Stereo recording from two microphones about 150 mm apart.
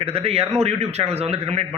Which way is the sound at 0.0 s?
40° right (ahead or behind).